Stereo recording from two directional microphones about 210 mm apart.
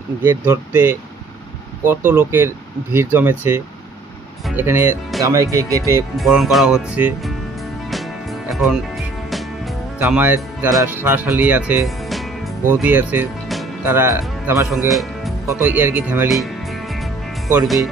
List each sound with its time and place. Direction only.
0.2 s speech: 10° right (ahead or behind)
6.1 s speech: centre (ahead or behind)
8.5 s speech: centre (ahead or behind)
9.9 s speech: 10° right (ahead or behind)
14.7 s speech: centre (ahead or behind)